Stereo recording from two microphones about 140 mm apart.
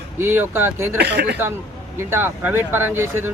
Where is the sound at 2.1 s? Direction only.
15° right (ahead or behind).